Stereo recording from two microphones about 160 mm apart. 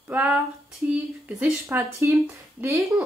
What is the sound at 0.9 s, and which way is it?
Speech, 15° right (ahead or behind).